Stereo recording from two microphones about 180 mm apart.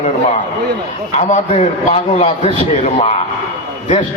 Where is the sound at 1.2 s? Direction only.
40° left (ahead or behind).